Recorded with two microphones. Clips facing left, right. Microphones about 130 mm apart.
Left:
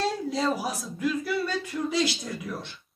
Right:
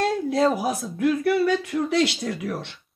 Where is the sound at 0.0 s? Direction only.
55° right (ahead or behind).